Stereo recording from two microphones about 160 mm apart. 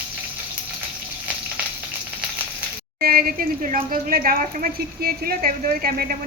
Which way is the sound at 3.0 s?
70° right (ahead or behind).